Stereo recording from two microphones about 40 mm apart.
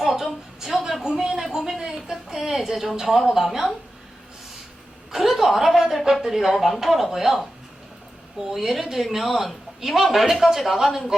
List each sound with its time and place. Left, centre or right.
0.0 s a sound: centre
2.0 s a woman's voice: centre
5.1 s a woman's voice: centre